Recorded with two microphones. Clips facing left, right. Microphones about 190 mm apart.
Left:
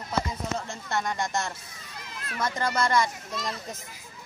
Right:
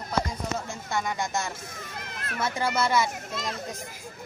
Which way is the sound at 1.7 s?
50° right (ahead or behind).